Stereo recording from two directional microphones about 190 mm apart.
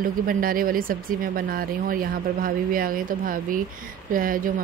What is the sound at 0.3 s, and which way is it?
Speech, 50° right (ahead or behind).